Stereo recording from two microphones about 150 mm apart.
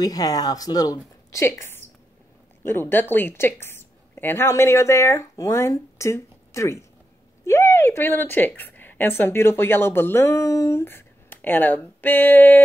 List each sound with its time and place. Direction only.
0.0 s a woman's voice: 25° left (ahead or behind)